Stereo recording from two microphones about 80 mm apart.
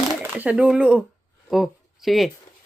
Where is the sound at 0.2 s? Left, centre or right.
Right.